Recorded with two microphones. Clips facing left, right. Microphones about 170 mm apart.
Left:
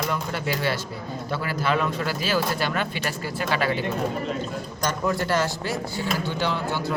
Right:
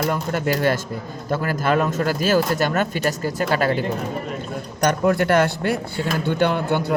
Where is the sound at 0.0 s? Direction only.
50° right (ahead or behind).